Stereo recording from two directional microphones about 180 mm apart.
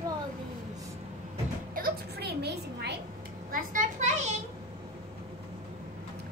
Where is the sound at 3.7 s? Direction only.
40° right (ahead or behind).